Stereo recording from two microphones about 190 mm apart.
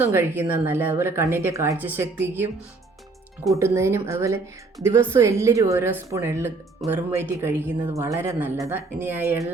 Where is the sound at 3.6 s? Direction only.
15° right (ahead or behind).